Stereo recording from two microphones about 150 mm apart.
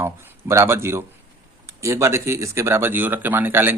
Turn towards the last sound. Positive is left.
turn(degrees=-15)  # may be behind; listen again after turning